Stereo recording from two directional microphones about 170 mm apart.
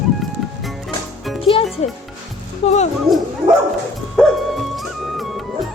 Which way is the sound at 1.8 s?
40° left (ahead or behind).